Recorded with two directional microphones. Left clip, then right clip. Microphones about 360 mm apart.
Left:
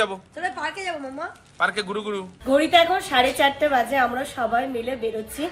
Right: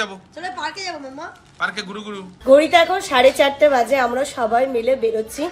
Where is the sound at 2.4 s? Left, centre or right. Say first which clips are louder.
Right 5 dB; centre.